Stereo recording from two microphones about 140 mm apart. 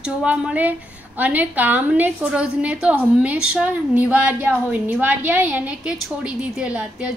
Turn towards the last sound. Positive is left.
turn(degrees=-10)  # may be behind; listen again after turning